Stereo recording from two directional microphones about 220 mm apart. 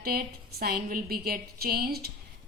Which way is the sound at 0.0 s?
45° right (ahead or behind).